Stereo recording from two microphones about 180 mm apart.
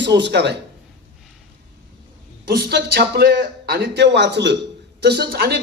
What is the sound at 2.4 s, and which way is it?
A man's voice, 60° right (ahead or behind).